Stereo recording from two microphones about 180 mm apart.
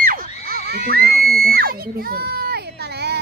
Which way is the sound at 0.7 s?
60° right (ahead or behind).